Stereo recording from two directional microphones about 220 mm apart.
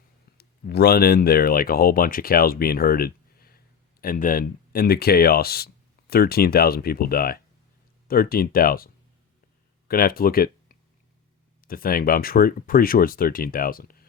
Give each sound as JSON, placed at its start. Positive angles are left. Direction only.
{"t": 0.3, "sound": "speech", "side_deg": 45}
{"t": 9.9, "sound": "speech", "side_deg": 40}